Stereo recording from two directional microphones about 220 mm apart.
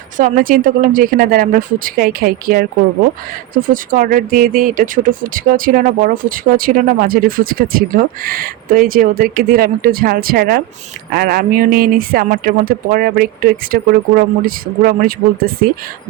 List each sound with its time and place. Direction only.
0.2 s speech: 40° right (ahead or behind)